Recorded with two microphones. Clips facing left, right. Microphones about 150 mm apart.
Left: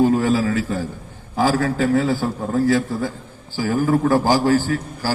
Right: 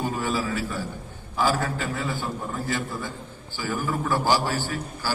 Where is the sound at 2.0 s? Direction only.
90° left.